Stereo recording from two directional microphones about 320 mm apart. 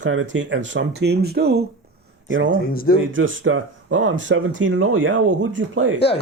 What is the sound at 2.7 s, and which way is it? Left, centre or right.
Speech, left.